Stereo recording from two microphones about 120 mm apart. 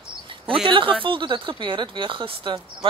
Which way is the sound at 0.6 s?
45° right (ahead or behind).